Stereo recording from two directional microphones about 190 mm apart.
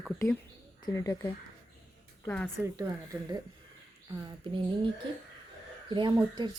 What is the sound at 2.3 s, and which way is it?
Speech, 5° left (ahead or behind).